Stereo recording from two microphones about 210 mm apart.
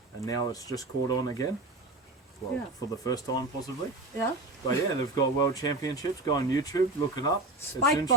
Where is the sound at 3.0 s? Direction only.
15° left (ahead or behind).